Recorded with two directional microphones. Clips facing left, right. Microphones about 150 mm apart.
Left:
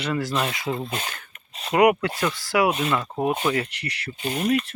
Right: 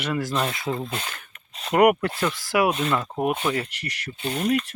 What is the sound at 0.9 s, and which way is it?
Speech, 15° left (ahead or behind).